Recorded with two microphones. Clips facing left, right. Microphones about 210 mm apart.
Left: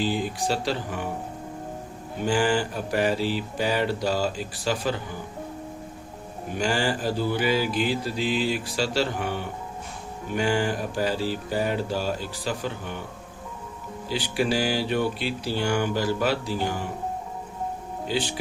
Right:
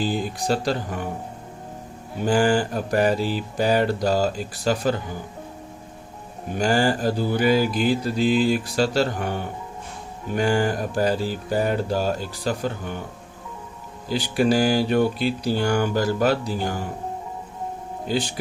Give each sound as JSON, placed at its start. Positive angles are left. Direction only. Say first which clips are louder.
{"t": 0.0, "sound": "mantra", "louder": "right 1 dB", "side_deg": -40}
{"t": 2.2, "sound": "mantra", "louder": "right 4 dB", "side_deg": -40}
{"t": 6.6, "sound": "mantra", "louder": "right 5 dB", "side_deg": -40}
{"t": 14.1, "sound": "mantra", "louder": "right 5 dB", "side_deg": -45}